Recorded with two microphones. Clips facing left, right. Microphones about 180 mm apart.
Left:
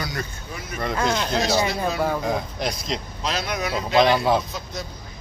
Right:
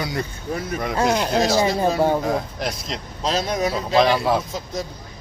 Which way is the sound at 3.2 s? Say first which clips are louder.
Right 5 dB; 40° right (ahead or behind).